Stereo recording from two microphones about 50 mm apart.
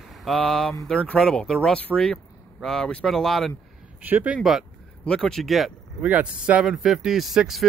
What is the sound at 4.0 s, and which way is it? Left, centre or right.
Speech, right.